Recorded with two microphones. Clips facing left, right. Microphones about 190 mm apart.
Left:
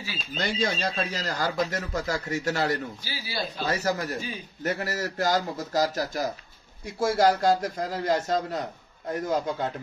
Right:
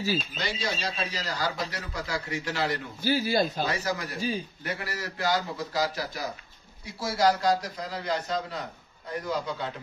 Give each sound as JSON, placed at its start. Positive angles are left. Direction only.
{"t": 0.4, "sound": "speech", "side_deg": 50}
{"t": 3.0, "sound": "speech", "side_deg": -50}
{"t": 3.6, "sound": "speech", "side_deg": 40}